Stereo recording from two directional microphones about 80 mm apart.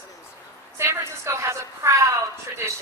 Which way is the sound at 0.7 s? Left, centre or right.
Right.